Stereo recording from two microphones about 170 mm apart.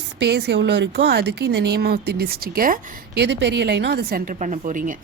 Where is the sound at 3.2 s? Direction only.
85° right; by 4.4 s 65° right (ahead or behind).